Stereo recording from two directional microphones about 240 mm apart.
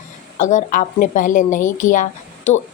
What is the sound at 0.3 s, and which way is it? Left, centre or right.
A woman's voice, left.